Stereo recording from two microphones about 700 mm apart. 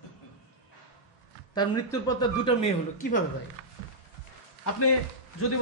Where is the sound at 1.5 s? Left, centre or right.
Centre.